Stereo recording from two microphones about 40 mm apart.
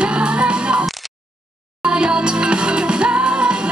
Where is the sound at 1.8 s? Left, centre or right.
Right.